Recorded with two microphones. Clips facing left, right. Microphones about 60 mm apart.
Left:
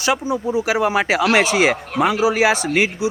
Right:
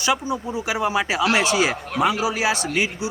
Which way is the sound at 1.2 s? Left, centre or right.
Left.